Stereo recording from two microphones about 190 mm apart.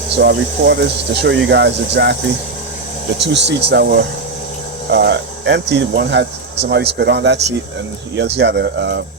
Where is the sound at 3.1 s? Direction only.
65° right (ahead or behind).